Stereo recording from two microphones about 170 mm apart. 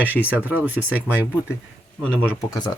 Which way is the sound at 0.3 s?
10° right (ahead or behind).